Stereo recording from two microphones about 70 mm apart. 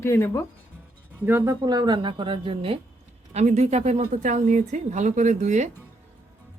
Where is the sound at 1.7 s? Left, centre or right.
Right.